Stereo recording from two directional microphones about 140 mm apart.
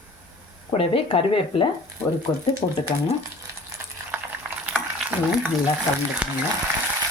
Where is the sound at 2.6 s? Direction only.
40° left (ahead or behind).